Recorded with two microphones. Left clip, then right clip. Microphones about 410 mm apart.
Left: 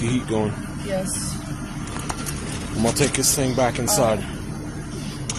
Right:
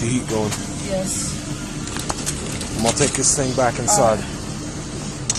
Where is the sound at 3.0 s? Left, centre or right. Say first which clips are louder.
Right 2 dB; left.